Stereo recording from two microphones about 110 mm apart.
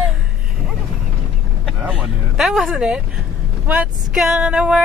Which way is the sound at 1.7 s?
15° right (ahead or behind).